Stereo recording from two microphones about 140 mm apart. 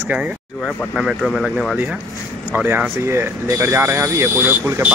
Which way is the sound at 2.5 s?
10° right (ahead or behind).